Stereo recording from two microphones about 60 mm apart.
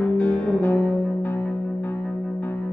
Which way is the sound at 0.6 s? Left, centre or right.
Left.